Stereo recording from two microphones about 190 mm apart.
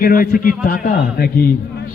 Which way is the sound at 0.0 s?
50° left (ahead or behind).